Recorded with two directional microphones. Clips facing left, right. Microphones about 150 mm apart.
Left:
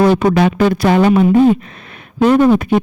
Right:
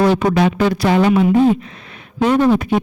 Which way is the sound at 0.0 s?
55° left (ahead or behind).